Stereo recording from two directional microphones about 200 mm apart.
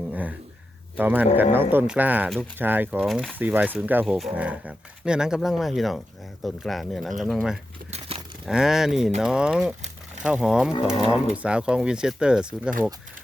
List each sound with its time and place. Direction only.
0.1 s a sound: 5° right (ahead or behind)
0.9 s speech: 10° right (ahead or behind)
7.9 s tearing: 30° right (ahead or behind)
8.4 s speech: 5° right (ahead or behind)